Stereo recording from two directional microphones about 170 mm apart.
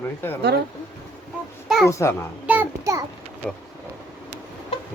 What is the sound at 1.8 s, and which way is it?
Speech, 15° left (ahead or behind).